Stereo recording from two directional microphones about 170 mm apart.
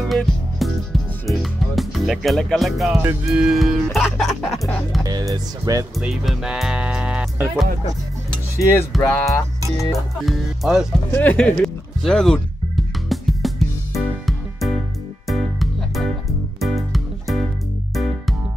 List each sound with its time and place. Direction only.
0.0 s music: centre (ahead or behind)
3.3 s speech: 5° right (ahead or behind)
4.6 s music: 5° left (ahead or behind)
5.0 s speech: 20° right (ahead or behind)
5.9 s speech: 5° right (ahead or behind)
8.5 s music: 15° left (ahead or behind)
9.9 s speech: centre (ahead or behind)
11.1 s music: 10° left (ahead or behind)